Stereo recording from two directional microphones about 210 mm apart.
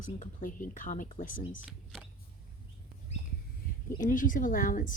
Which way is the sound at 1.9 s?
5° right (ahead or behind).